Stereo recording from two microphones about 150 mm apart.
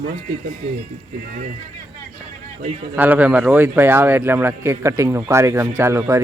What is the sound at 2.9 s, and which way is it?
Speech, 10° right (ahead or behind).